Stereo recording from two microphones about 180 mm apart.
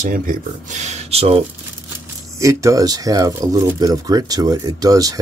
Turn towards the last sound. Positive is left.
turn(degrees=-20)  # may be behind; listen again after turning